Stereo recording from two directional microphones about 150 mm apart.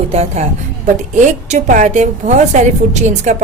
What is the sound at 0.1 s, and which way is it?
A woman's voice, 45° right (ahead or behind).